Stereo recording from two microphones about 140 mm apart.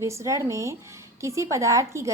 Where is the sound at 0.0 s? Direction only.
20° right (ahead or behind).